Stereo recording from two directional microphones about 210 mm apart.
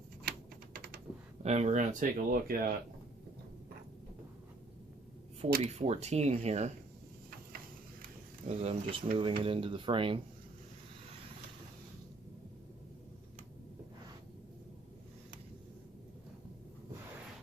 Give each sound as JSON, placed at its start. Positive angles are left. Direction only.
{"t": 0.3, "sound": "typing", "side_deg": -45}
{"t": 1.4, "sound": "speech", "side_deg": -30}
{"t": 5.6, "sound": "speech", "side_deg": -30}
{"t": 8.0, "sound": "a sound", "side_deg": -30}
{"t": 9.1, "sound": "speech", "side_deg": -25}